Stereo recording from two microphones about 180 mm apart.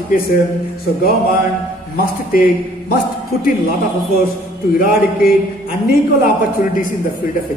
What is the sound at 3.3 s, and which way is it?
Speech, 55° left (ahead or behind).